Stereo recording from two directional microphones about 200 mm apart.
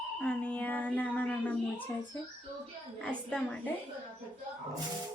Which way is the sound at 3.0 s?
5° left (ahead or behind).